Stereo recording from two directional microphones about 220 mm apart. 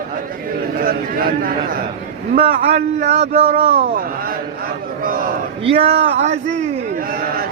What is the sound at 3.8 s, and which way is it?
Speech, 40° right (ahead or behind).